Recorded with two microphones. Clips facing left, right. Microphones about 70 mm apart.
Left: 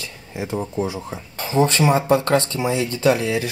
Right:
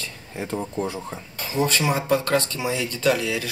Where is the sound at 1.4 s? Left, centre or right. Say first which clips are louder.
Left 5 dB; left.